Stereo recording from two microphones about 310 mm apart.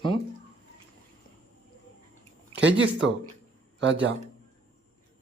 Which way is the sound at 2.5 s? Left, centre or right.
Right.